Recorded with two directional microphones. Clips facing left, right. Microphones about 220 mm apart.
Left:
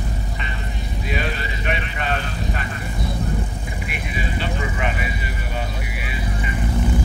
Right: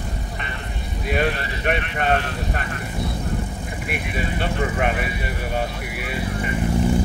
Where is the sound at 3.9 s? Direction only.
55° right (ahead or behind).